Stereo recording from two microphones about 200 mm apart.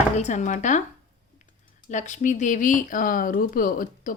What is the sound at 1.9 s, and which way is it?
Speech, 35° left (ahead or behind).